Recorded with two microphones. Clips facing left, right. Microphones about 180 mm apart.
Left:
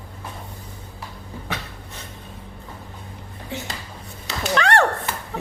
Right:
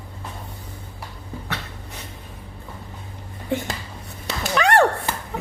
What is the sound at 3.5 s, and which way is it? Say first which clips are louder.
Speech: right 7 dB; 55° right (ahead or behind).